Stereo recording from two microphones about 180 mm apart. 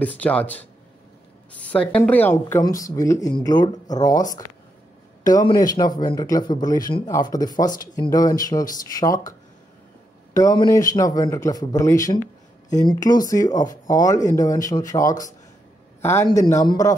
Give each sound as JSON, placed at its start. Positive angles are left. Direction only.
{"t": 0.0, "sound": "a woman's voice", "side_deg": 10}
{"t": 5.5, "sound": "speech", "side_deg": 20}
{"t": 10.3, "sound": "a man's voice", "side_deg": 20}